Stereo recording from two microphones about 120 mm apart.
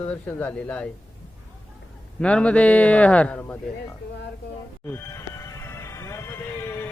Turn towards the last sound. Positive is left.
turn(degrees=20)  # may be behind; listen again after turning